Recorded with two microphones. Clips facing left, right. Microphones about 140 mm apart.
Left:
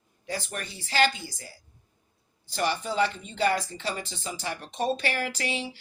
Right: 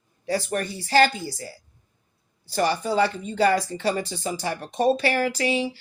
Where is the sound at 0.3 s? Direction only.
45° right (ahead or behind).